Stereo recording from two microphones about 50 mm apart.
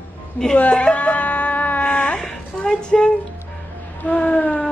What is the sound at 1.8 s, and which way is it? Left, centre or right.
Wail, left.